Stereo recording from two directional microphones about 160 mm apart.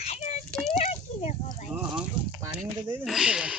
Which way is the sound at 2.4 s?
20° right (ahead or behind).